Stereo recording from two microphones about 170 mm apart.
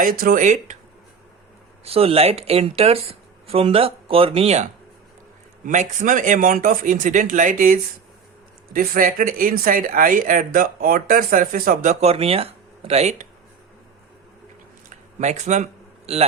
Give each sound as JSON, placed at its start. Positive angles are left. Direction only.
{"t": 0.0, "sound": "speech", "side_deg": -55}
{"t": 1.8, "sound": "speech", "side_deg": -35}
{"t": 14.8, "sound": "a sound", "side_deg": -45}